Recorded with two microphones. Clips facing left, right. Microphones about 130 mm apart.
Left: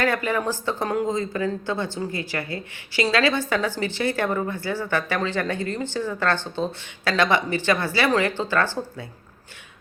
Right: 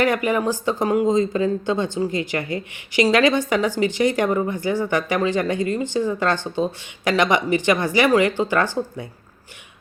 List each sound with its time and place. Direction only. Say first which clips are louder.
0.0 s speech: right 4 dB; 15° right (ahead or behind)